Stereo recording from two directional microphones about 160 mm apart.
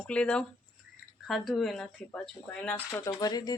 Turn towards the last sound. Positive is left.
turn(degrees=25)  # may be behind; listen again after turning